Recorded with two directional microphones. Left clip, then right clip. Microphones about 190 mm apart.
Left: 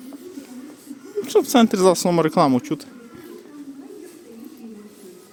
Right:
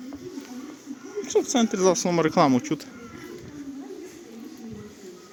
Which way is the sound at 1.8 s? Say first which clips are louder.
Left 5 dB; 25° left (ahead or behind).